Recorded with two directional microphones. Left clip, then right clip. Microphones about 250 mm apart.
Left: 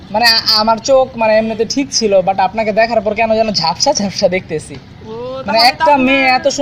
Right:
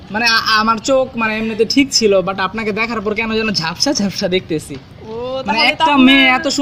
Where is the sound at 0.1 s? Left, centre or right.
Right.